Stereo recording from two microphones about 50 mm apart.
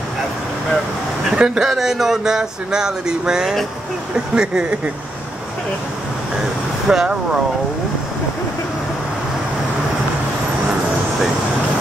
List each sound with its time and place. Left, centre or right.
1.3 s speech: centre
6.9 s speech: centre